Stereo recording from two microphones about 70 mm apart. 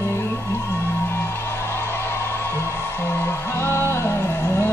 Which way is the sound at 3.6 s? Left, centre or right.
Left.